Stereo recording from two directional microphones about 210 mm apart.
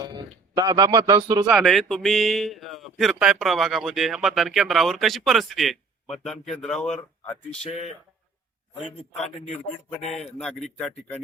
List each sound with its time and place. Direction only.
0.0 s a man's voice: 20° right (ahead or behind)
1.5 s speech: centre (ahead or behind)
10.2 s speech: centre (ahead or behind)